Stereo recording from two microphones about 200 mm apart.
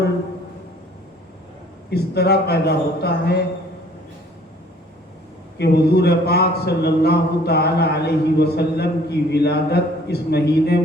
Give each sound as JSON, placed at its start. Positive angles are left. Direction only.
{"t": 1.9, "sound": "speech", "side_deg": 55}
{"t": 5.5, "sound": "speech", "side_deg": 55}